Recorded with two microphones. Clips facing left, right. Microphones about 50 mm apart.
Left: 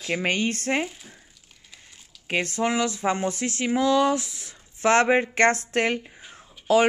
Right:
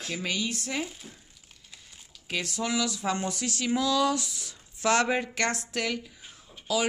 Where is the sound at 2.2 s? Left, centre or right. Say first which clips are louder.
Left 6 dB; left.